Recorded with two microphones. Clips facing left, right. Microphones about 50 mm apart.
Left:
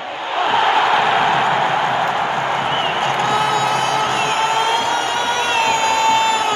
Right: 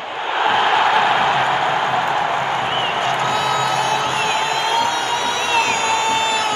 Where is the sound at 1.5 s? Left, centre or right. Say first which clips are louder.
Left 1 dB; left.